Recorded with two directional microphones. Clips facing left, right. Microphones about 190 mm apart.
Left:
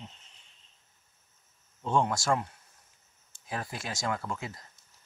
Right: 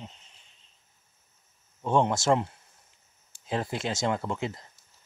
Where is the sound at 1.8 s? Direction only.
20° right (ahead or behind).